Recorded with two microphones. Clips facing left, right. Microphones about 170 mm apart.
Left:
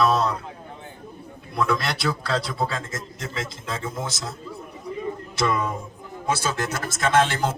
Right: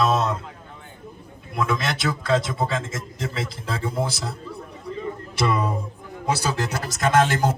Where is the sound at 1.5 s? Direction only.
20° right (ahead or behind).